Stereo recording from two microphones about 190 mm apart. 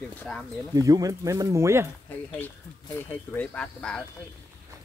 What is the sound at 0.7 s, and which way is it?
Speech, 20° right (ahead or behind).